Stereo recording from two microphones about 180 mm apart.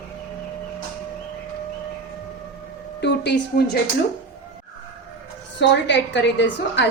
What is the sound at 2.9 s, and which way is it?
Speech, 70° left (ahead or behind).